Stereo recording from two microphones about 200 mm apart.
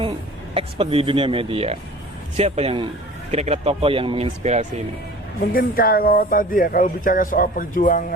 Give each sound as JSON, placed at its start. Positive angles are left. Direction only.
{"t": 0.5, "sound": "speech", "side_deg": -25}
{"t": 5.5, "sound": "speech", "side_deg": 45}